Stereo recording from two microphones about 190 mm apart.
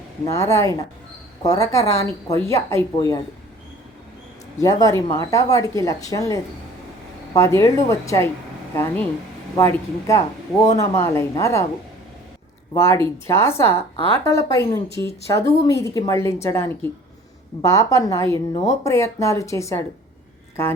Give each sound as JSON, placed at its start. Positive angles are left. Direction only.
{"t": 0.3, "sound": "a woman's voice", "side_deg": 15}
{"t": 4.6, "sound": "a woman's voice", "side_deg": 20}
{"t": 12.7, "sound": "a woman's voice", "side_deg": 15}
{"t": 18.5, "sound": "speech", "side_deg": 35}
{"t": 18.9, "sound": "a woman's voice", "side_deg": 15}